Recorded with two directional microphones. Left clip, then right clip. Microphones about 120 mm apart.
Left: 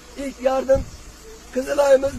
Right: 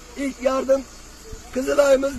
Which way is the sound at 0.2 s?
25° left (ahead or behind).